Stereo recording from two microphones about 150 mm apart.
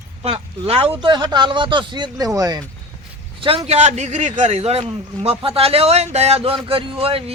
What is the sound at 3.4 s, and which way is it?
A man's voice, 35° right (ahead or behind).